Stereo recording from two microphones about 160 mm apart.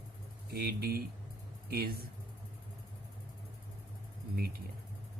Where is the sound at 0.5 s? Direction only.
70° right (ahead or behind).